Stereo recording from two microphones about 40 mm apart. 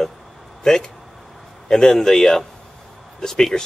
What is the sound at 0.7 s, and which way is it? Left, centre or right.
Speech, centre.